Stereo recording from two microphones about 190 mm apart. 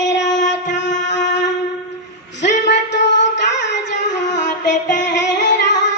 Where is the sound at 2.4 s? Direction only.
65° left (ahead or behind).